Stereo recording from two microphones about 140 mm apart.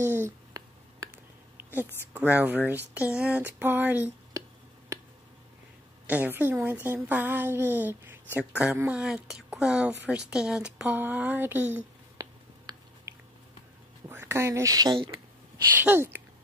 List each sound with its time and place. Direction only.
0.0 s a sound: 20° right (ahead or behind)
1.8 s a woman's voice: 10° right (ahead or behind)
6.0 s a woman's voice: 10° right (ahead or behind)
12.2 s a sound: 25° right (ahead or behind)
14.0 s speech: 20° right (ahead or behind)
15.7 s a woman's voice: 15° right (ahead or behind)